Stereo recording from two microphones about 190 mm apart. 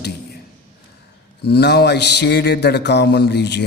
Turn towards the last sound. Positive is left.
turn(degrees=65)  # may be behind; listen again after turning